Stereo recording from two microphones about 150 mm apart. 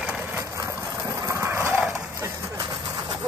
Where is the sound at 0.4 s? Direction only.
20° right (ahead or behind).